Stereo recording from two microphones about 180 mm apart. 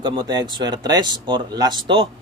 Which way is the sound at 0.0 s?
25° right (ahead or behind).